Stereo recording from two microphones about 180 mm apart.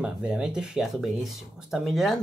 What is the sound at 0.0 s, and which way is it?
Speech, 5° right (ahead or behind).